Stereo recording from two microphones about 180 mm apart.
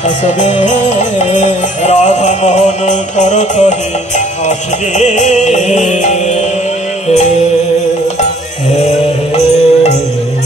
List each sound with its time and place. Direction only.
0.0 s music: 40° left (ahead or behind)